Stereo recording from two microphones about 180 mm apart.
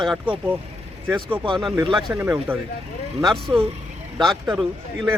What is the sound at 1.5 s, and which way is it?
Speech, centre (ahead or behind).